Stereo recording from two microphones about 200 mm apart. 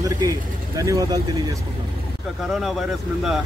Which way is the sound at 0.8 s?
15° right (ahead or behind).